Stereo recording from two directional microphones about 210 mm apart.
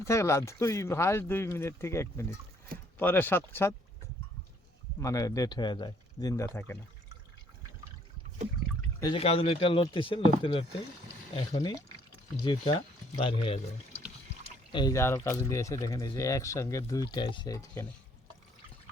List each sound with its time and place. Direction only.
0.0 s speech: 15° left (ahead or behind)
4.9 s speech: 15° left (ahead or behind)
9.0 s speech: 20° left (ahead or behind)
14.7 s speech: 20° left (ahead or behind)